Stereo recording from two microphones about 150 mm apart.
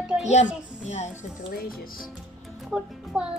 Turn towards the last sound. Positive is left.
turn(degrees=-5)  # may be behind; listen again after turning